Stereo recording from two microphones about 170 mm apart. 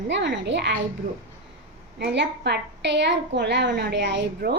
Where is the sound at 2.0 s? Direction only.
90° right.